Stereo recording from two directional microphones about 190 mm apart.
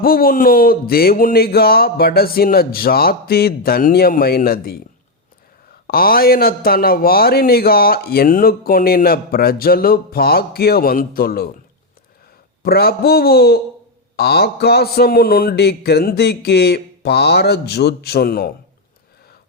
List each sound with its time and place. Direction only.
0.0 s a man's voice: 50° left (ahead or behind)
5.9 s a man's voice: 50° left (ahead or behind)
12.6 s a sound: 55° left (ahead or behind)